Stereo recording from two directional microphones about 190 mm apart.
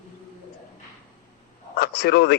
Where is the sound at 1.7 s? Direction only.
55° left (ahead or behind).